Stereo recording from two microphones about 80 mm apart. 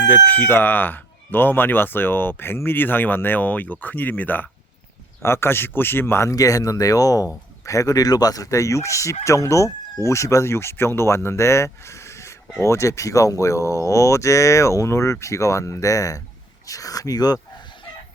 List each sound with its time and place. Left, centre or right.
0.1 s speech: left
5.2 s speech: left
6.3 s speech: left